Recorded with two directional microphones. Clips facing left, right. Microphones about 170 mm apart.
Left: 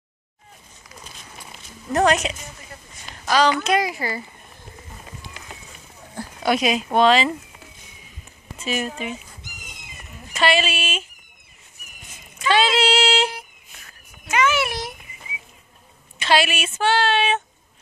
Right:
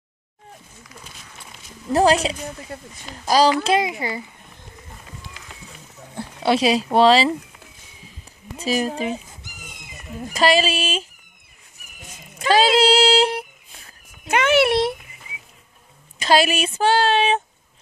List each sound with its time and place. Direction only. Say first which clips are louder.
1.9 s a child's voice: right 2 dB; 30° right (ahead or behind)
6.1 s speech: right 2 dB; 30° right (ahead or behind)
8.5 s speech: right 4 dB; 35° right (ahead or behind)
10.3 s speech: right 3 dB; 35° right (ahead or behind)
12.4 s speech: right 3 dB; 35° right (ahead or behind)
14.3 s a child's voice: right 5 dB; 60° right (ahead or behind)
16.2 s speech: right 3 dB; 40° right (ahead or behind)